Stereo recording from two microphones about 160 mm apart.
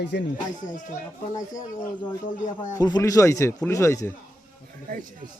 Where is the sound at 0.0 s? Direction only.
90° left.